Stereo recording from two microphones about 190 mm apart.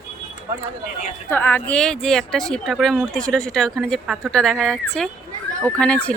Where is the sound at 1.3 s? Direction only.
10° left (ahead or behind).